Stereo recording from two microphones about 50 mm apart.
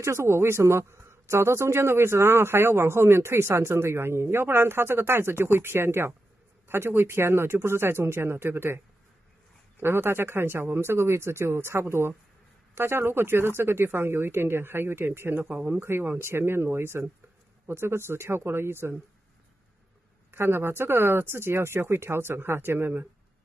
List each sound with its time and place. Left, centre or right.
0.0 s speech: right
15.5 s speech: right
15.8 s speech: right
20.2 s speech: right